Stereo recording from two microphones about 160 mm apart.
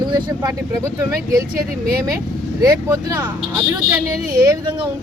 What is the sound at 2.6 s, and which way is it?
Speech, 20° right (ahead or behind).